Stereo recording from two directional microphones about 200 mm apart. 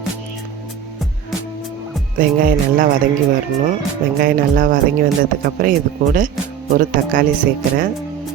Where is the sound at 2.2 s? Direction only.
45° right (ahead or behind).